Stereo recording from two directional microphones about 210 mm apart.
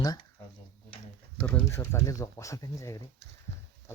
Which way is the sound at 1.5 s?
10° left (ahead or behind).